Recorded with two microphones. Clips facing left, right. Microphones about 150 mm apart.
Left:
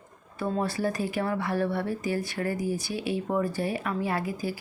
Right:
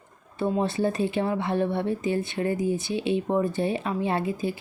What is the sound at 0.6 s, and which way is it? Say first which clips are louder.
Speech: right 3 dB; 25° right (ahead or behind).